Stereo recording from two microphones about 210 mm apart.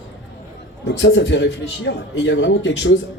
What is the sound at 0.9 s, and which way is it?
A man's voice, 55° left (ahead or behind).